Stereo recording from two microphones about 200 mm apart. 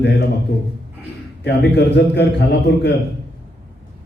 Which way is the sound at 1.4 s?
55° left (ahead or behind).